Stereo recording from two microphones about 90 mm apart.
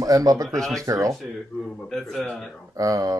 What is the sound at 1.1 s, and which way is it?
Speech, centre (ahead or behind).